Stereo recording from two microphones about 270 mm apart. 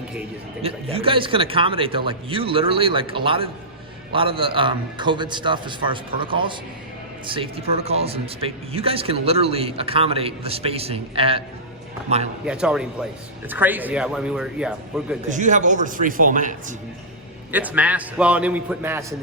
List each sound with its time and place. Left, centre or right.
0.6 s a man's voice: right
12.5 s a man's voice: centre
15.3 s speech: right
17.5 s a man's voice: centre